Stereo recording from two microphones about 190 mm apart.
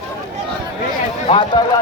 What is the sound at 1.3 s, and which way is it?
Speech, 25° left (ahead or behind).